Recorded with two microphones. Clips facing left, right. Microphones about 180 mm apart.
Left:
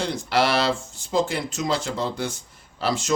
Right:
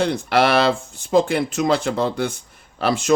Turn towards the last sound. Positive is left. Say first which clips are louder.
# right 6 dB
turn(degrees=-55)  # may be behind; listen again after turning